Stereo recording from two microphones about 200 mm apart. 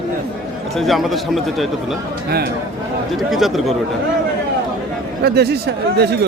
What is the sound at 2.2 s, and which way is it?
Speech, 50° right (ahead or behind).